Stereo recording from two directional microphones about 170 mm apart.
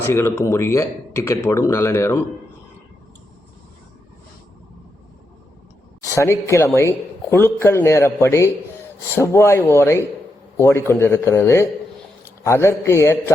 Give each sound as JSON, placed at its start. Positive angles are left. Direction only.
{"t": 0.0, "sound": "speech", "side_deg": 15}
{"t": 6.1, "sound": "speech", "side_deg": 15}